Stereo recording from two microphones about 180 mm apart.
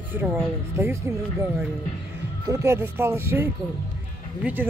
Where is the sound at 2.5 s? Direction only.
15° right (ahead or behind).